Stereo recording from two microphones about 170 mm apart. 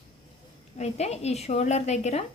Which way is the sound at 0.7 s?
40° left (ahead or behind).